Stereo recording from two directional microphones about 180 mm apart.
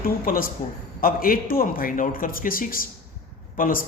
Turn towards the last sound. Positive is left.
turn(degrees=50)  # may be behind; listen again after turning